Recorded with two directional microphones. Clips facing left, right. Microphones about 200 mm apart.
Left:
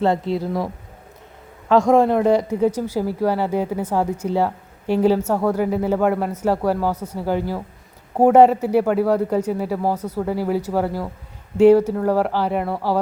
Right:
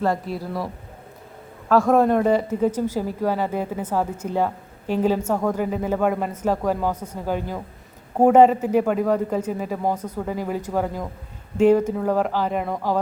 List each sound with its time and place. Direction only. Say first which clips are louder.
0.0 s speech: left 4 dB; 25° left (ahead or behind)
1.9 s a woman's voice: left 2 dB; 10° left (ahead or behind)